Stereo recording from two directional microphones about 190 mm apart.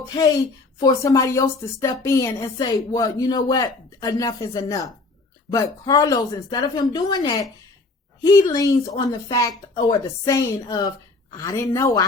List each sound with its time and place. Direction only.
0.1 s a woman's voice: 20° left (ahead or behind)
8.5 s a woman's voice: 20° left (ahead or behind)